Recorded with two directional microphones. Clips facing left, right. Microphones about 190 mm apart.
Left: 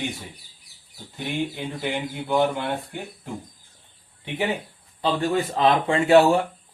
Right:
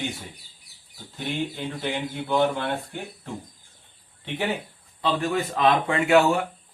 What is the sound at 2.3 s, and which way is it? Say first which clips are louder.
Speech: left 1 dB; 15° left (ahead or behind).